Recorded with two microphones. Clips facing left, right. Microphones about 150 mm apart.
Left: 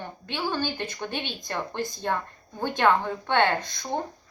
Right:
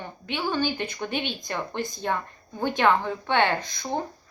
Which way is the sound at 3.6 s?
60° left (ahead or behind).